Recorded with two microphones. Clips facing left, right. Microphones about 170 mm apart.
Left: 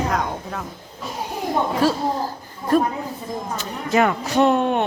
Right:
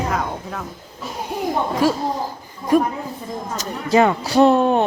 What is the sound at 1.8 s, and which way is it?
Child singing, 10° right (ahead or behind).